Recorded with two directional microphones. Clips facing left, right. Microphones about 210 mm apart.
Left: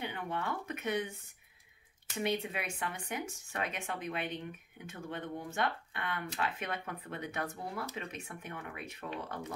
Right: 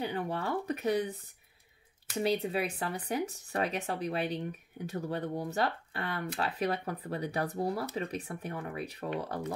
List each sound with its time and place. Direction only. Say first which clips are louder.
0.0 s speech: right 4 dB; 35° right (ahead or behind)